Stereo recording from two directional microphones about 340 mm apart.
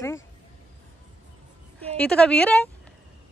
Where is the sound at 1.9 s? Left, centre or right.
Centre.